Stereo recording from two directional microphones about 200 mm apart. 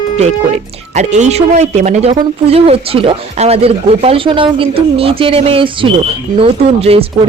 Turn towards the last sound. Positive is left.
turn(degrees=-30)  # may be behind; listen again after turning